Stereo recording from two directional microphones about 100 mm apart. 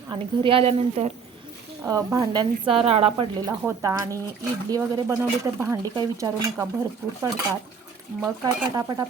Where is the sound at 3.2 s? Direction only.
45° right (ahead or behind); by 5.7 s 25° right (ahead or behind).